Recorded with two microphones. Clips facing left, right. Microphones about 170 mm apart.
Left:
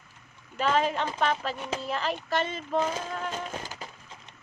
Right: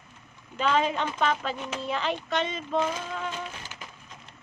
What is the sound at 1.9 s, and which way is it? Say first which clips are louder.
Speech: right 2 dB; centre (ahead or behind).